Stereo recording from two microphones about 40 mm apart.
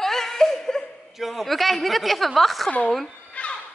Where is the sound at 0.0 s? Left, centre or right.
Centre.